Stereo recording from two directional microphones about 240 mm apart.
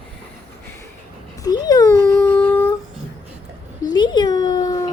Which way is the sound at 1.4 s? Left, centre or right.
Centre.